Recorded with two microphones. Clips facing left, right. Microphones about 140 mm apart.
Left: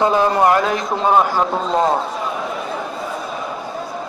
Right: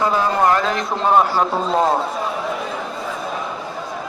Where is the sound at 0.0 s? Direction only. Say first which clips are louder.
Left 3 dB; 20° left (ahead or behind).